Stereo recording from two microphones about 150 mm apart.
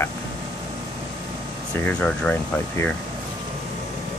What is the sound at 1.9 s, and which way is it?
Speech, 5° left (ahead or behind).